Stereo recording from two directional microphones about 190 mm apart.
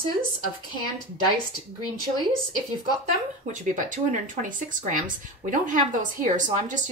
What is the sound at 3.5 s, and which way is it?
A woman's voice, 40° right (ahead or behind).